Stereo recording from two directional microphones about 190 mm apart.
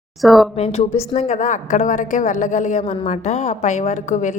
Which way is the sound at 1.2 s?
35° left (ahead or behind).